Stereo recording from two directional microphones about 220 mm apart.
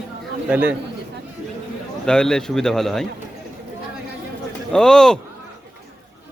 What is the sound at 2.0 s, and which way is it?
A man's voice, 5° left (ahead or behind).